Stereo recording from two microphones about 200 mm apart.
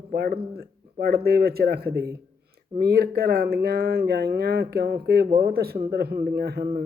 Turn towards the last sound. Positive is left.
turn(degrees=-50)  # may be behind; listen again after turning